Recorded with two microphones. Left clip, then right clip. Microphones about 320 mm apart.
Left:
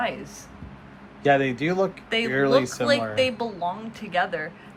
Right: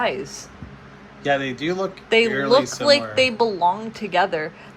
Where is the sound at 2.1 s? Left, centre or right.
Centre.